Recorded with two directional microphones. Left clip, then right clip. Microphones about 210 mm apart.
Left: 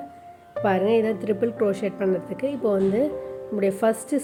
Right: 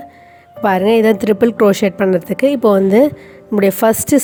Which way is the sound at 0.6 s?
50° right (ahead or behind).